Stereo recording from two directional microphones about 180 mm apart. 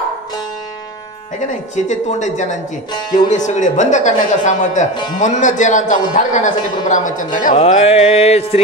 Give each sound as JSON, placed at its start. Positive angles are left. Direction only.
{"t": 1.8, "sound": "a woman's voice", "side_deg": 40}
{"t": 2.9, "sound": "speech", "side_deg": 25}
{"t": 3.3, "sound": "a woman's voice", "side_deg": 40}
{"t": 7.5, "sound": "a woman's voice", "side_deg": 35}